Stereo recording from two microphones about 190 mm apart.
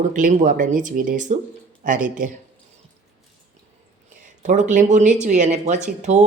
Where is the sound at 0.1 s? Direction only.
45° right (ahead or behind).